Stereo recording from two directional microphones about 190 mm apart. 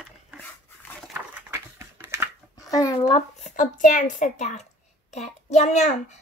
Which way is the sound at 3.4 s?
45° left (ahead or behind).